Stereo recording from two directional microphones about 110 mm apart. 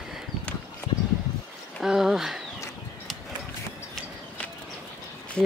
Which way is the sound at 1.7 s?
5° right (ahead or behind).